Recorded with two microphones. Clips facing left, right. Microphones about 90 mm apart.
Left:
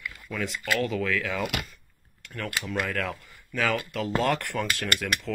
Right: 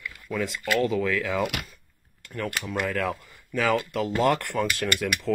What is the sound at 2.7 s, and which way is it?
Speech, 10° right (ahead or behind).